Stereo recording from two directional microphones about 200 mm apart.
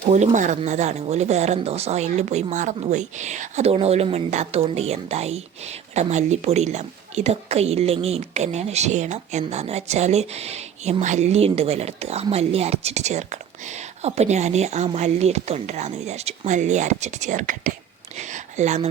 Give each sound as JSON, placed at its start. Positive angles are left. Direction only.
{"t": 0.0, "sound": "a woman's voice", "side_deg": -35}